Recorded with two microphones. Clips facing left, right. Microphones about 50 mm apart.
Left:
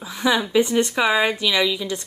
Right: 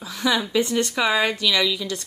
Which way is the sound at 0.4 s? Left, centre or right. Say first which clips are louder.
Left 3 dB; centre.